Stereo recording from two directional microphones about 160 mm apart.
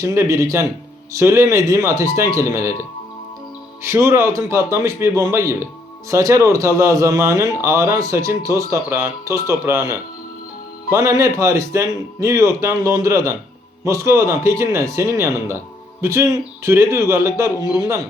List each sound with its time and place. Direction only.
0.0 s speech: 20° right (ahead or behind)
3.8 s speech: 15° right (ahead or behind)